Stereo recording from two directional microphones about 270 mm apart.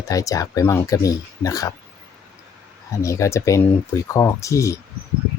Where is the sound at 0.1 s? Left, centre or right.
Centre.